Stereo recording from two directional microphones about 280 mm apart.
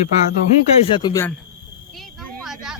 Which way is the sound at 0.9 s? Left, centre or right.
Centre.